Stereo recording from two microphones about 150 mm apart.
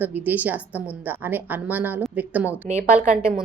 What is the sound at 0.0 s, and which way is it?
A woman's voice, 10° right (ahead or behind).